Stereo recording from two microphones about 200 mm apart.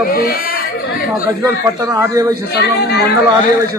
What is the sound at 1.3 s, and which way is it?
A man's voice, 15° right (ahead or behind).